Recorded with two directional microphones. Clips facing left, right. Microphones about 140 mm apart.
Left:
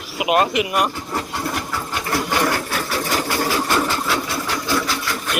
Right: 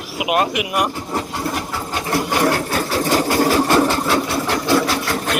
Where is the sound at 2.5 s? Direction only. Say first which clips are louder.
Right 4 dB; 35° right (ahead or behind).